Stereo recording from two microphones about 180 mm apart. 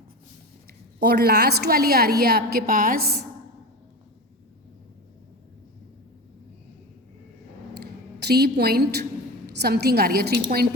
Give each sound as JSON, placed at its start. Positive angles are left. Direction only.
{"t": 0.9, "sound": "a woman's voice", "side_deg": -65}
{"t": 7.8, "sound": "a sound", "side_deg": -60}
{"t": 9.6, "sound": "a woman's voice", "side_deg": -65}